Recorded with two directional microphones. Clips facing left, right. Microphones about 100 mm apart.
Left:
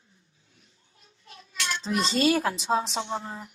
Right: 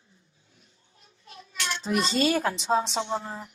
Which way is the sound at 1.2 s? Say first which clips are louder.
Even; 25° right (ahead or behind).